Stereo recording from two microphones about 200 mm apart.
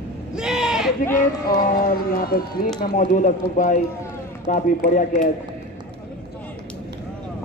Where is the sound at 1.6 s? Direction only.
45° left (ahead or behind).